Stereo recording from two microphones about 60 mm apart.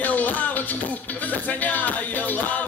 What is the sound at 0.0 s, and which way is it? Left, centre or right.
Music, left.